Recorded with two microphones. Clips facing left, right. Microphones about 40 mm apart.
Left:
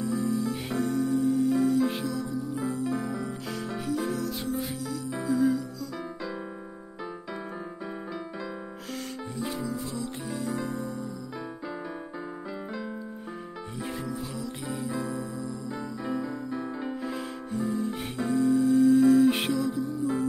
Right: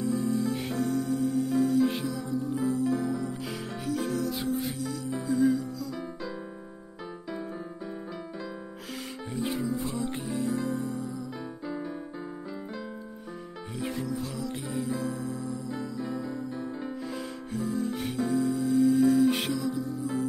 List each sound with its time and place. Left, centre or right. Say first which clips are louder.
0.0 s music: even; centre
9.3 s music: right 3 dB; centre
9.7 s music: right 2 dB; right
13.7 s music: right 2 dB; centre
16.0 s music: left 2 dB; left
16.8 s music: left 2 dB; centre